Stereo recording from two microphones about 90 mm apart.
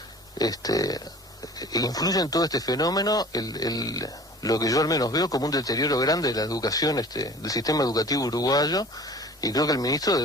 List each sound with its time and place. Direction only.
0.3 s speech: 45° left (ahead or behind)